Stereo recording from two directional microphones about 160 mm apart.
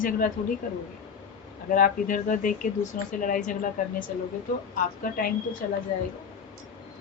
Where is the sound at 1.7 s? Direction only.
60° left (ahead or behind).